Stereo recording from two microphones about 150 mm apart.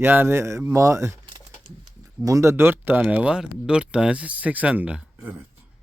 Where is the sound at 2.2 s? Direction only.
20° right (ahead or behind).